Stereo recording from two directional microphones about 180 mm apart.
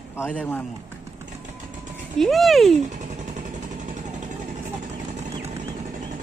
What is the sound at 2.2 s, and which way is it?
Speech, centre (ahead or behind).